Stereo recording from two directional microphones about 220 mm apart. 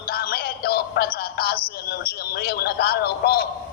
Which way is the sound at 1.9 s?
45° left (ahead or behind).